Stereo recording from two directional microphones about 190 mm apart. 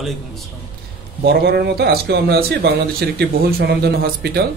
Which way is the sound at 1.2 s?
60° right (ahead or behind).